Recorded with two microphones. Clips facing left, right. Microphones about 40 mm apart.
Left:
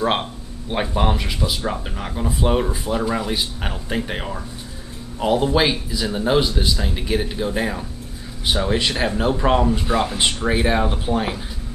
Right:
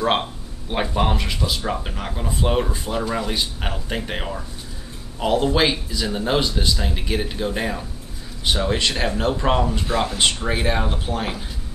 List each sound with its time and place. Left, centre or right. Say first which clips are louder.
0.0 s speech: even; centre